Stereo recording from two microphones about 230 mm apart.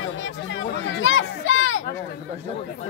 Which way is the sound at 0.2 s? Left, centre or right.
Left.